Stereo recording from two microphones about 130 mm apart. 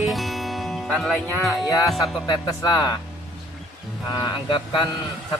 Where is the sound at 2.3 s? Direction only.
30° left (ahead or behind).